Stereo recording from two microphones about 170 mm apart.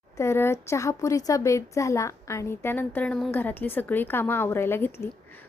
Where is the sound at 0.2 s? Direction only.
15° left (ahead or behind).